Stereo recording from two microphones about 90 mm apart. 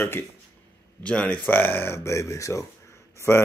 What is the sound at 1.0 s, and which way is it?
Speech, 10° left (ahead or behind).